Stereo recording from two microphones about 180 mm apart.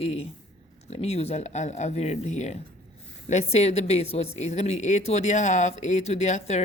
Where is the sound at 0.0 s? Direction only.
35° left (ahead or behind).